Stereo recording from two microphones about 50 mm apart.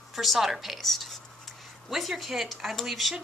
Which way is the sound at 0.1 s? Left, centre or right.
Centre.